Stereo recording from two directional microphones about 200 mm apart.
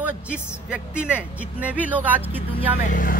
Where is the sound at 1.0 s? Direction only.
5° right (ahead or behind).